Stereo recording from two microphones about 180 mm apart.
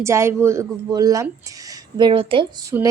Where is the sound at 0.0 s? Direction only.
15° right (ahead or behind).